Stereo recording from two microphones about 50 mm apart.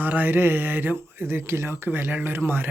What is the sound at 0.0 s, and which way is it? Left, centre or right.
Speech, right.